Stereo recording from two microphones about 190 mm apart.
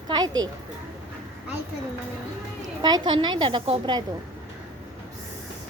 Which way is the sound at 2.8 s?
25° right (ahead or behind).